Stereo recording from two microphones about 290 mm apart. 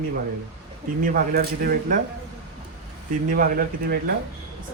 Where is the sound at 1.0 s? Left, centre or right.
Right.